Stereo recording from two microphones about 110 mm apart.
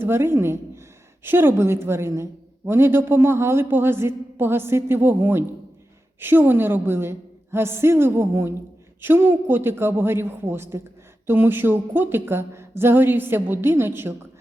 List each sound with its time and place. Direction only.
0.0 s a woman's voice: 20° right (ahead or behind)